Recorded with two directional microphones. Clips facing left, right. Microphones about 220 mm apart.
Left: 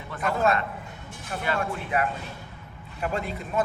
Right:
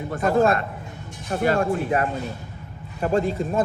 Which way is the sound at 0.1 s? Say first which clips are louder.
Right 5 dB; 35° right (ahead or behind).